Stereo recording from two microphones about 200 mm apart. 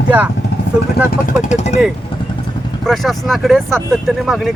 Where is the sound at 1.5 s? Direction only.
35° left (ahead or behind).